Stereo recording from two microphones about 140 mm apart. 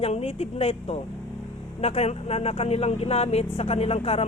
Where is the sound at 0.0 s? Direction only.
45° left (ahead or behind).